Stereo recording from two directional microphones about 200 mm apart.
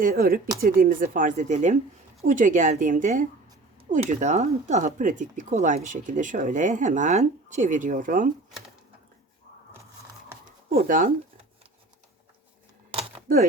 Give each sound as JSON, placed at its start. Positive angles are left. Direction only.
{"t": 0.0, "sound": "speech", "side_deg": -45}
{"t": 10.8, "sound": "speech", "side_deg": -40}
{"t": 12.9, "sound": "a sound", "side_deg": -25}
{"t": 13.2, "sound": "speech", "side_deg": -45}